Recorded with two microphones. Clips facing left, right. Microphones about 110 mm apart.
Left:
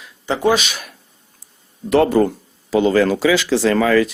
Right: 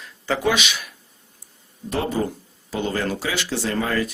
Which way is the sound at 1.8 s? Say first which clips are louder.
Left 10 dB; 70° left (ahead or behind).